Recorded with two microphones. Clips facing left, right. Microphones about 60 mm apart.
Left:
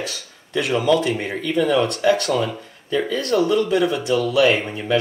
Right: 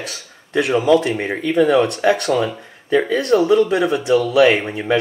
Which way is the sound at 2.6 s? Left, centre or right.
Right.